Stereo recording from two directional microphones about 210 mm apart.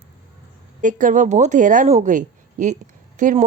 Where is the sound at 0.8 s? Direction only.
40° right (ahead or behind).